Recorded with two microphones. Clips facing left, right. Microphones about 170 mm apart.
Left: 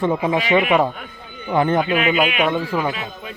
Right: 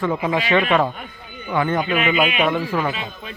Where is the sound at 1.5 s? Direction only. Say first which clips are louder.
Left 3 dB; 30° left (ahead or behind).